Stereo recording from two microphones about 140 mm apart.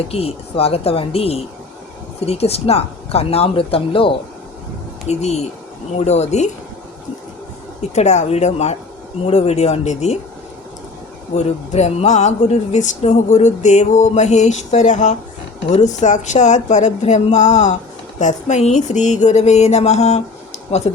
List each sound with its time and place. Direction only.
0.1 s speech: 45° left (ahead or behind)
5.0 s speech: 50° left (ahead or behind)
7.8 s speech: 55° left (ahead or behind)
11.3 s speech: 50° left (ahead or behind)